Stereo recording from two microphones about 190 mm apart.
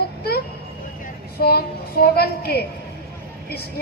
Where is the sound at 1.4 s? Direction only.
55° left (ahead or behind).